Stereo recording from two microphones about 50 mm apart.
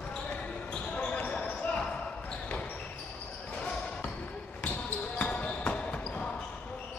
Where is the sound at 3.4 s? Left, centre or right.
Centre.